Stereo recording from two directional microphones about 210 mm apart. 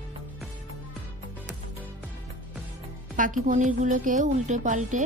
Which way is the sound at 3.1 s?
40° right (ahead or behind).